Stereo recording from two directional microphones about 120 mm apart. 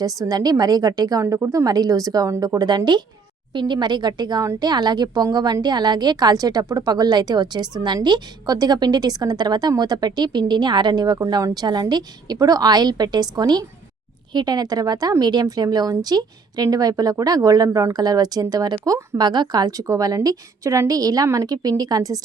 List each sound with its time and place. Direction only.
0.0 s speech: 30° right (ahead or behind)